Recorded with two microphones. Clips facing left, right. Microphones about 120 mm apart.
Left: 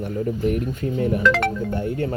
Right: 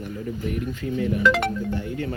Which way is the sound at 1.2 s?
5° right (ahead or behind).